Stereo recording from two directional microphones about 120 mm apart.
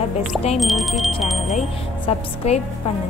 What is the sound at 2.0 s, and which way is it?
Speech, 60° left (ahead or behind).